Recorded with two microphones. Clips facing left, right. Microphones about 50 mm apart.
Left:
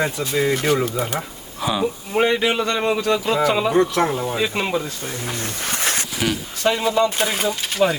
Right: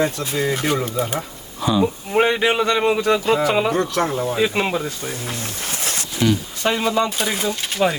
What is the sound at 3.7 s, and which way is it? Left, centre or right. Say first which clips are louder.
Speech: left 2 dB; centre.